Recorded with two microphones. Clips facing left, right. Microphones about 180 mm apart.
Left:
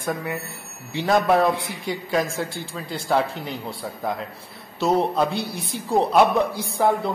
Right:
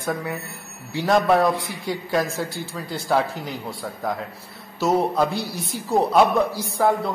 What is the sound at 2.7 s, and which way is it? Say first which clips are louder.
Speech: even; centre (ahead or behind).